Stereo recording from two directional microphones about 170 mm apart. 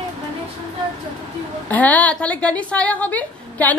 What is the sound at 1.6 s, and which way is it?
A woman's voice, 10° left (ahead or behind).